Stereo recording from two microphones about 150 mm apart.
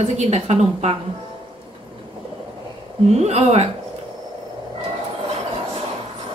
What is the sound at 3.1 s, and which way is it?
Speech, 45° right (ahead or behind).